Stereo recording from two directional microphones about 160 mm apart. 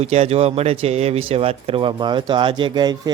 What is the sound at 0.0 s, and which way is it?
Speech, 40° right (ahead or behind).